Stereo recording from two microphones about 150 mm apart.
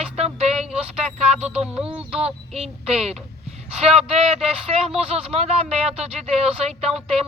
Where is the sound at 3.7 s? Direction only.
45° right (ahead or behind).